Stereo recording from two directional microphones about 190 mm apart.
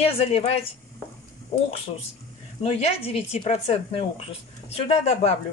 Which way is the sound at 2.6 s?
35° left (ahead or behind).